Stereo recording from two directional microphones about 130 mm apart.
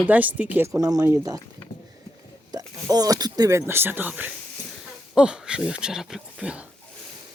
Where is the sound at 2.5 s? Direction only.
30° right (ahead or behind); by 6.6 s 5° right (ahead or behind).